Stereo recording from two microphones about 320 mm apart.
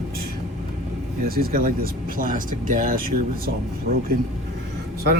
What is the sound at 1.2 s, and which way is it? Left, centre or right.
Speech, right.